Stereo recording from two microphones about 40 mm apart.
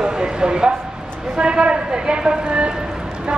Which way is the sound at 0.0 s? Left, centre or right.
Right.